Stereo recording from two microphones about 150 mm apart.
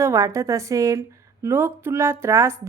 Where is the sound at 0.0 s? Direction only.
20° right (ahead or behind).